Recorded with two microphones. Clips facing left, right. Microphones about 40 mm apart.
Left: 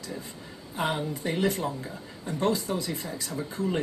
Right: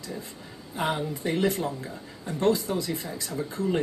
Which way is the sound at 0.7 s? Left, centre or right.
Centre.